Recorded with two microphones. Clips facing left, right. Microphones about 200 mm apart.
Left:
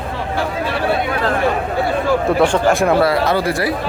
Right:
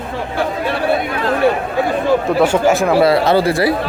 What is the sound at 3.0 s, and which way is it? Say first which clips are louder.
Speech: right 3 dB; 30° right (ahead or behind).